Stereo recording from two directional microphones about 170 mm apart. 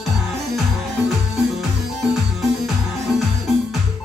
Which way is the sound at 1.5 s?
Centre (ahead or behind).